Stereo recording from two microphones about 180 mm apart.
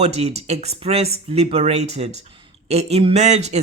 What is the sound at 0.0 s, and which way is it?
Speech, 35° right (ahead or behind).